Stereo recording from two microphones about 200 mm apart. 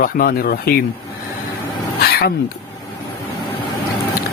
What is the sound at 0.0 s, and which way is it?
Speech, 45° left (ahead or behind).